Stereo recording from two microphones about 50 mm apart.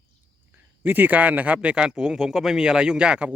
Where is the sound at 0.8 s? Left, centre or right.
Right.